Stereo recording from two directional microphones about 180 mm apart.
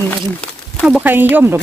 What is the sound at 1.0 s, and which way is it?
Speech, 10° right (ahead or behind).